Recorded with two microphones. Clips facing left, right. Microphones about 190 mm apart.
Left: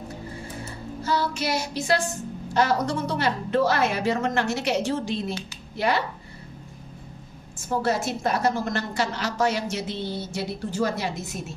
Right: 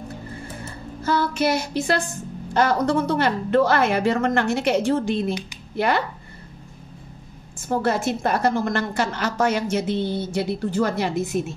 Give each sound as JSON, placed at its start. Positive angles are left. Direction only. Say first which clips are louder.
{"t": 1.0, "sound": "child singing", "louder": "right 5 dB", "side_deg": -55}
{"t": 2.5, "sound": "a woman's voice", "louder": "right 4 dB", "side_deg": -55}
{"t": 7.5, "sound": "a woman's voice", "louder": "right 3 dB", "side_deg": -55}